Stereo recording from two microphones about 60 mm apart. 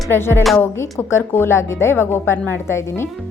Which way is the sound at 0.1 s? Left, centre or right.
Left.